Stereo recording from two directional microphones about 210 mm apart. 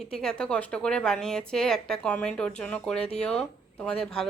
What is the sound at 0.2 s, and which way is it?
Speech, 5° left (ahead or behind).